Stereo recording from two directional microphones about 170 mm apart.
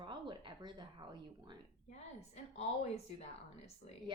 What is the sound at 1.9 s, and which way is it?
A woman's voice, 40° left (ahead or behind).